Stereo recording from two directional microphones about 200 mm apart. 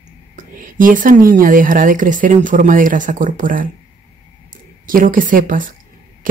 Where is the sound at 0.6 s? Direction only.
40° right (ahead or behind).